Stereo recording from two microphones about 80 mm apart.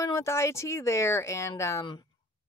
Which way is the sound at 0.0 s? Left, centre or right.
Left.